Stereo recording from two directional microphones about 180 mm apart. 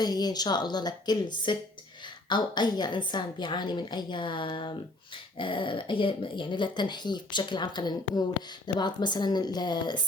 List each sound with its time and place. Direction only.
0.0 s a woman's voice: 20° left (ahead or behind)